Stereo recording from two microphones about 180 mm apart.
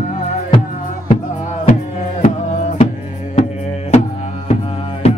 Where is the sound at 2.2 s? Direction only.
40° left (ahead or behind).